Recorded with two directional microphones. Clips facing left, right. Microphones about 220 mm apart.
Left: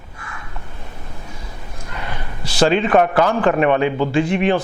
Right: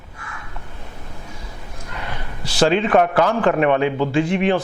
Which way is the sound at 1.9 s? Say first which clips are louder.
Left 1 dB; 20° left (ahead or behind).